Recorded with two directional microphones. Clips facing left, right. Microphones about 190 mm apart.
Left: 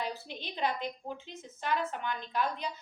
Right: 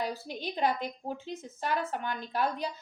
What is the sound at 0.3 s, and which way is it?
A woman's voice, 45° right (ahead or behind).